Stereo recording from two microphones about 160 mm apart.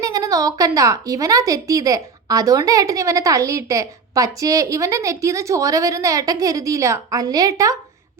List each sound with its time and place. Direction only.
0.0 s speech: 20° right (ahead or behind)